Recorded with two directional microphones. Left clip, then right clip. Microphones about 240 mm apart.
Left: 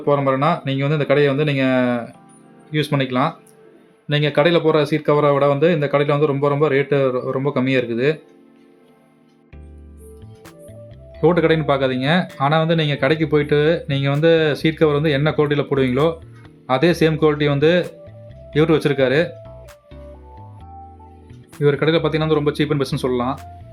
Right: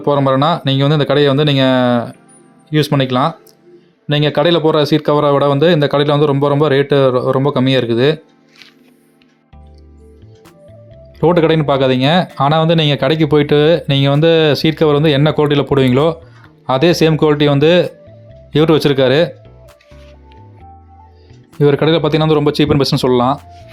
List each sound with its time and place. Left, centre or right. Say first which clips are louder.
0.0 s speech: right 4 dB; right
11.2 s speech: right 4 dB; right
21.6 s speech: right 5 dB; right